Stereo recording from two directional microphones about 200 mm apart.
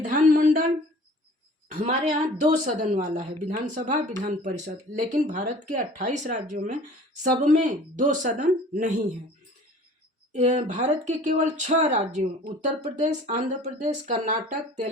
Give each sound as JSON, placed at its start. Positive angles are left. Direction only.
{"t": 0.0, "sound": "a sound", "side_deg": -40}
{"t": 1.8, "sound": "speech", "side_deg": -30}
{"t": 10.3, "sound": "speech", "side_deg": -35}